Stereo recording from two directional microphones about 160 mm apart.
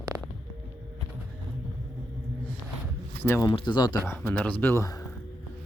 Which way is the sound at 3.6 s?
30° left (ahead or behind).